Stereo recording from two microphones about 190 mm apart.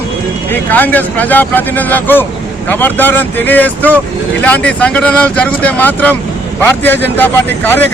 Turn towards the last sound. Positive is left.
turn(degrees=10)  # may be behind; listen again after turning